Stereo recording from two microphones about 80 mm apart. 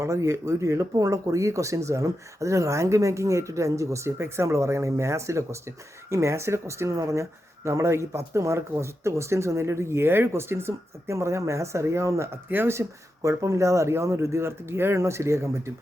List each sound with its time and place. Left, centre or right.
0.0 s speech: right
13.2 s speech: right